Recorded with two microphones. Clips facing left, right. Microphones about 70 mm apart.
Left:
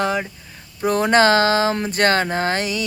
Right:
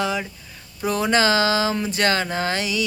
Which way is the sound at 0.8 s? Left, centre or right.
Left.